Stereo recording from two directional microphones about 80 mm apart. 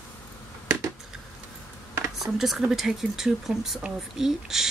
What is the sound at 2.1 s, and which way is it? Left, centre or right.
A woman's voice, centre.